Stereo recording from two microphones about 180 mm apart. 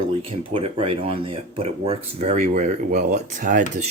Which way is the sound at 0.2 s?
30° right (ahead or behind).